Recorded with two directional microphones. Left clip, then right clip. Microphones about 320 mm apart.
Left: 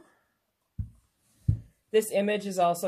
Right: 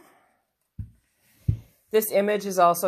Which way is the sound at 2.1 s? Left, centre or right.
Centre.